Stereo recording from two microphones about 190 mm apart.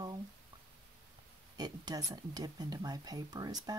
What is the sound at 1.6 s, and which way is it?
Speech, 20° right (ahead or behind).